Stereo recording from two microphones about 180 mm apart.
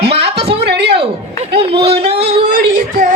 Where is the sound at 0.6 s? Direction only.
65° right (ahead or behind).